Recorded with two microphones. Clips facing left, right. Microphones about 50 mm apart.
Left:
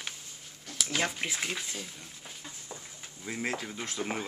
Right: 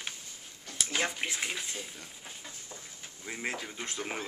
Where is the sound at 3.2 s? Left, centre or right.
Centre.